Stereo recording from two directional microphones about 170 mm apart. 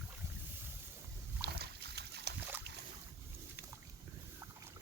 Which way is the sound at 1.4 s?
70° right (ahead or behind).